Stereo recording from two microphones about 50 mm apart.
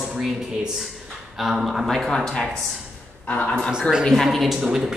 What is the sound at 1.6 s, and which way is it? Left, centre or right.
Speech, centre.